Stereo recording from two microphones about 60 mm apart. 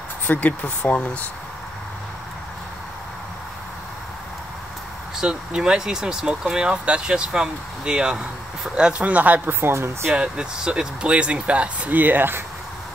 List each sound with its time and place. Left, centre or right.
0.3 s speech: left
5.3 s speech: centre; by 9.9 s right
10.1 s speech: centre; by 12.4 s right